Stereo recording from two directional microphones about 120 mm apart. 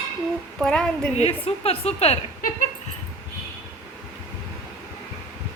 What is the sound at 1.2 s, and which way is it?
A woman's voice, 60° left (ahead or behind).